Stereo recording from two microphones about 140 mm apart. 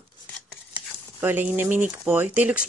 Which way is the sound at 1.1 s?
15° right (ahead or behind).